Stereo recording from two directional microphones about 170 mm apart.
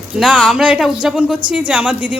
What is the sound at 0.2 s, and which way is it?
A woman's voice, 5° right (ahead or behind).